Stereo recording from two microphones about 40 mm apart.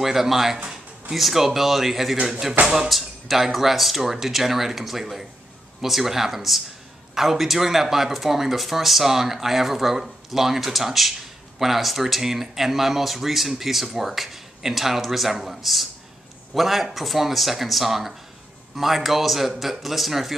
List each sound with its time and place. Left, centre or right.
0.0 s speech: centre
2.6 s speech: right
2.9 s speech: centre